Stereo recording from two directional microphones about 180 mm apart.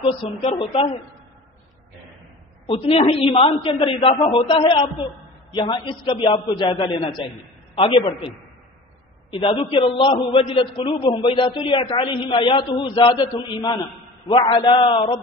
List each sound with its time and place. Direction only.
0.4 s a woman's voice: 35° left (ahead or behind)
3.0 s a man's voice: 30° left (ahead or behind)
9.3 s a man's voice: 30° left (ahead or behind)